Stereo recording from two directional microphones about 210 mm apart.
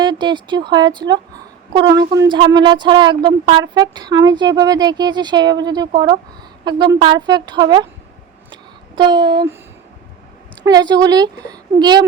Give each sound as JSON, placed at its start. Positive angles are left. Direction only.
{"t": 0.0, "sound": "speech", "side_deg": -20}
{"t": 9.0, "sound": "speech", "side_deg": -20}
{"t": 10.6, "sound": "speech", "side_deg": -20}